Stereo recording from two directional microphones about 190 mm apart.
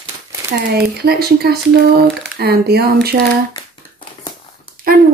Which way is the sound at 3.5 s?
25° left (ahead or behind).